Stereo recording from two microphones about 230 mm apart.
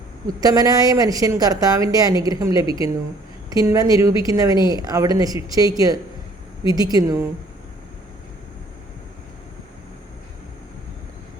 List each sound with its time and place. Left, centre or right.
0.3 s speech: centre
2.6 s a woman's voice: left
3.6 s speech: centre